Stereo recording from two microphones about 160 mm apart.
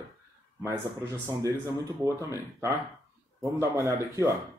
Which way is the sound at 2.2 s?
20° right (ahead or behind).